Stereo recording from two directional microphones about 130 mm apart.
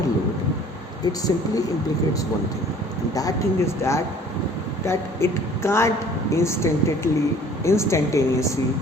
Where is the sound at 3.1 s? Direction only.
25° left (ahead or behind).